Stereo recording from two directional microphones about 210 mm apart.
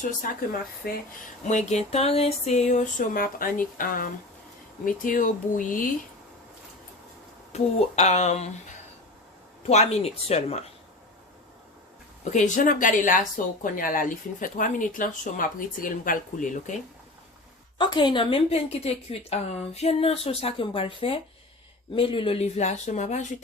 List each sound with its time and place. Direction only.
0.8 s speech: 45° left (ahead or behind)
1.5 s speech: 35° left (ahead or behind)
7.5 s speech: 30° left (ahead or behind)
9.6 s speech: 30° left (ahead or behind)
12.2 s speech: 35° left (ahead or behind)
17.7 s speech: 20° left (ahead or behind)